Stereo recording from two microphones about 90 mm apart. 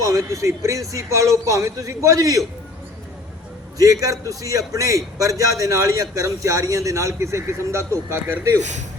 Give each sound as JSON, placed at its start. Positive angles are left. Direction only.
{"t": 0.0, "sound": "a man's voice", "side_deg": -40}
{"t": 3.8, "sound": "a man's voice", "side_deg": -40}